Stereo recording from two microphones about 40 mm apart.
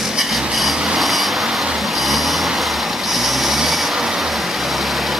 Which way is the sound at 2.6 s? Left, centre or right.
Centre.